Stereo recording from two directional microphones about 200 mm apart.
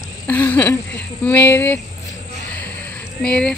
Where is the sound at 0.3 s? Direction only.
10° left (ahead or behind).